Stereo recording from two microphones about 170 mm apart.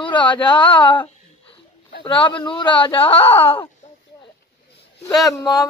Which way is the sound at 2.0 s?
30° left (ahead or behind).